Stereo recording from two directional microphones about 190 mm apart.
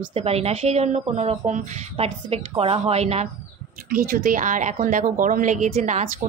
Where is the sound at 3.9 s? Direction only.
50° right (ahead or behind).